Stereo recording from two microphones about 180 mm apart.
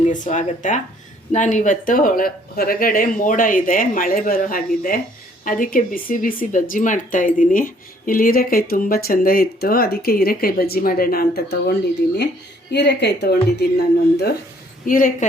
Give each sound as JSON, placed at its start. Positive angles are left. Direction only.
{"t": 0.1, "sound": "a woman's voice", "side_deg": 45}
{"t": 14.8, "sound": "speech", "side_deg": 50}